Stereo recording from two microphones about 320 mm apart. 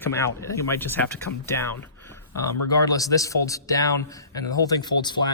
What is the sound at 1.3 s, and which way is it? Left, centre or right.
Speech, left.